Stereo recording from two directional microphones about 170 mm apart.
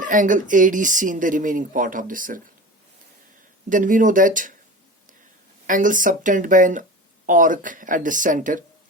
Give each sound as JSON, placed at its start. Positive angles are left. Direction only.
{"t": 0.0, "sound": "speech", "side_deg": -50}
{"t": 3.7, "sound": "speech", "side_deg": -50}
{"t": 5.6, "sound": "speech", "side_deg": -50}